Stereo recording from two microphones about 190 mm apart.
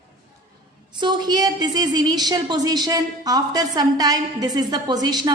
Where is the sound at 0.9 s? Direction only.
25° right (ahead or behind).